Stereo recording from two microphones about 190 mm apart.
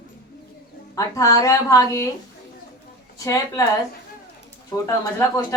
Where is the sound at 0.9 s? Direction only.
15° left (ahead or behind).